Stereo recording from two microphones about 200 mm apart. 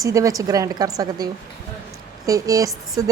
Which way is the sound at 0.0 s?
15° right (ahead or behind).